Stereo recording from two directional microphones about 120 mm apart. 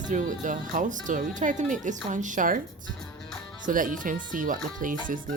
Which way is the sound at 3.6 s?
90° right.